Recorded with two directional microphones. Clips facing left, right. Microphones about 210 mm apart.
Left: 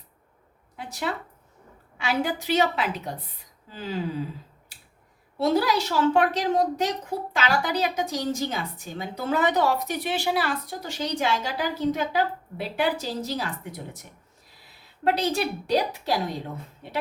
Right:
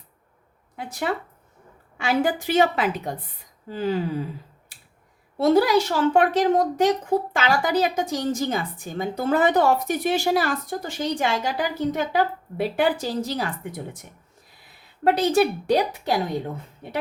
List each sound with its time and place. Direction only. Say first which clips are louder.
0.8 s a woman's voice: right 4 dB; 50° right (ahead or behind)
5.4 s a woman's voice: right 5 dB; 50° right (ahead or behind)
15.0 s a woman's voice: right 5 dB; 50° right (ahead or behind)